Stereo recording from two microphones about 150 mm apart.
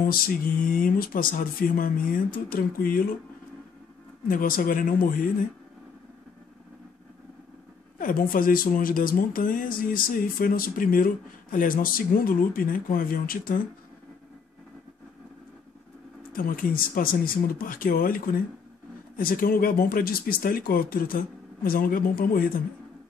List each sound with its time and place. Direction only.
0.0 s speech: 70° left (ahead or behind)
4.3 s speech: 65° left (ahead or behind)
8.0 s speech: 70° left (ahead or behind)
16.3 s speech: 70° left (ahead or behind)